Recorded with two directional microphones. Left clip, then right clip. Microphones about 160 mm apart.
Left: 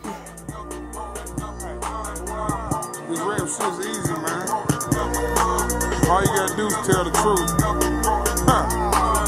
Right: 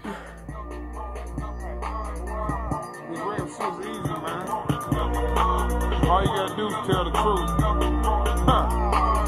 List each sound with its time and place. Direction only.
2.3 s music: 30° left (ahead or behind)